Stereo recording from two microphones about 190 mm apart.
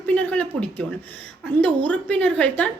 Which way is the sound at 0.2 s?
5° left (ahead or behind).